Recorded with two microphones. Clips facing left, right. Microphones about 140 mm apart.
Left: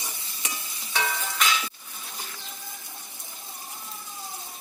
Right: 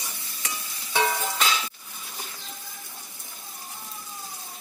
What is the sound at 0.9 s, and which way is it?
Music, 25° right (ahead or behind).